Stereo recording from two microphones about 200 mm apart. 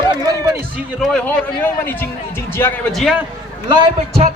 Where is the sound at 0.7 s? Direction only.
Centre (ahead or behind).